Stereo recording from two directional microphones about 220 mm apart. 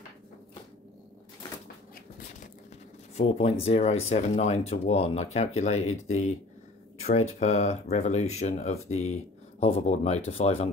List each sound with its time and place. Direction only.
3.2 s speech: 30° left (ahead or behind)
7.3 s speech: 30° left (ahead or behind)